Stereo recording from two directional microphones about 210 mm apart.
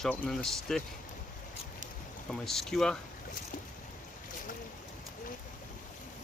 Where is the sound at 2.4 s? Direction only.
Centre (ahead or behind).